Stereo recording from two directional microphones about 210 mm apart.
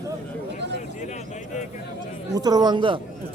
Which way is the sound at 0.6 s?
55° right (ahead or behind).